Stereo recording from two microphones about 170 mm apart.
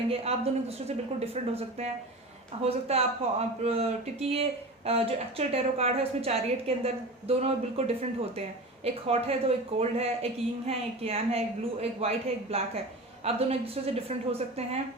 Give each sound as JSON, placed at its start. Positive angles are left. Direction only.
{"t": 0.1, "sound": "a woman's voice", "side_deg": -35}